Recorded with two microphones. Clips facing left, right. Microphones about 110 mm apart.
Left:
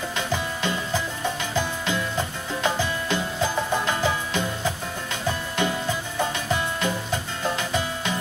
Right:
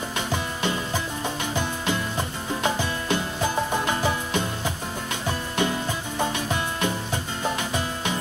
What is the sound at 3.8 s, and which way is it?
Music, 20° right (ahead or behind).